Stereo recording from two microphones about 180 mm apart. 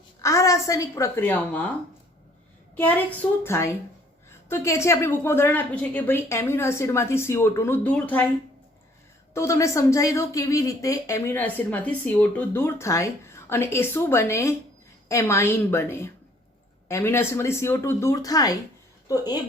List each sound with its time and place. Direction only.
0.2 s speech: 15° left (ahead or behind)
2.7 s speech: 10° left (ahead or behind)
9.3 s speech: 15° left (ahead or behind)